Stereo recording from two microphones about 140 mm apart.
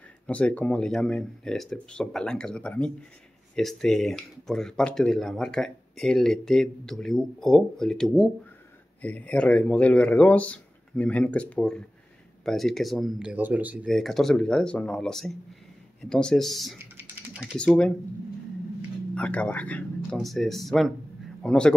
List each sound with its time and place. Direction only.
0.3 s speech: 10° left (ahead or behind); by 13.7 s 10° right (ahead or behind)
13.8 s speech: centre (ahead or behind)
16.7 s typing: 15° right (ahead or behind)
17.6 s speech: 5° left (ahead or behind)
19.1 s a man's voice: 10° left (ahead or behind)